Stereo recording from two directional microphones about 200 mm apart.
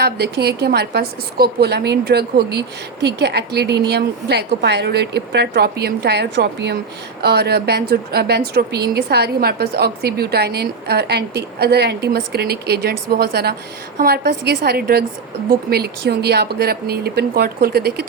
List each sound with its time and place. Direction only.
0.0 s a woman's voice: 55° right (ahead or behind)